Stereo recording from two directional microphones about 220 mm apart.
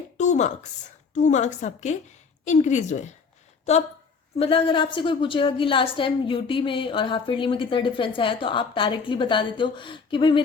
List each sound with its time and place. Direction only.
0.2 s a sound: 30° left (ahead or behind)
1.1 s a woman's voice: 30° left (ahead or behind)
4.4 s a woman's voice: 25° left (ahead or behind)